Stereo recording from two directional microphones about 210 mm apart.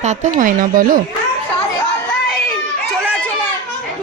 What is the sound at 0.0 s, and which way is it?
Speech, 35° right (ahead or behind).